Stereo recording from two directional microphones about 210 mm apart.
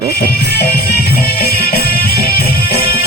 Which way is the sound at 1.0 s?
45° left (ahead or behind).